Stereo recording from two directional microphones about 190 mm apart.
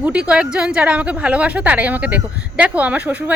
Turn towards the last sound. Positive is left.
turn(degrees=-10)  # may be behind; listen again after turning